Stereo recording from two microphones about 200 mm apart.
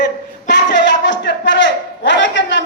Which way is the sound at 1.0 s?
60° left (ahead or behind).